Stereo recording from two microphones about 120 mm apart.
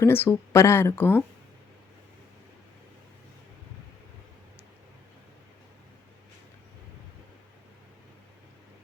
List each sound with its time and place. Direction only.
0.0 s speech: 20° left (ahead or behind)